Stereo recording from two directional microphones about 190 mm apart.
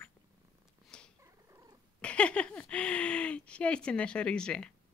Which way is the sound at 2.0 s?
5° left (ahead or behind).